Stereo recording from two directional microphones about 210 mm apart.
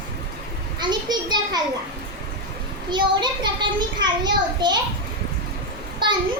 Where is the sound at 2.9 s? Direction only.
20° right (ahead or behind).